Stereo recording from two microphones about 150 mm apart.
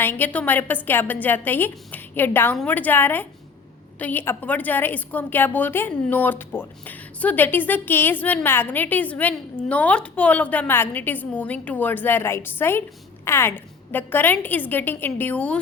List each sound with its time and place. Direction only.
0.0 s a woman's voice: 15° left (ahead or behind)